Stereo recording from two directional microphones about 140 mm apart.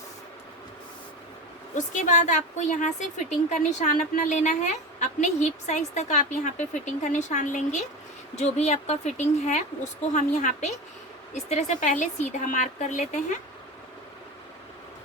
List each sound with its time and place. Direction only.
1.7 s a woman's voice: 60° left (ahead or behind)